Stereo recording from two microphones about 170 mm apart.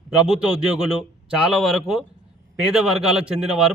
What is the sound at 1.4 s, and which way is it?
A man's voice, centre (ahead or behind).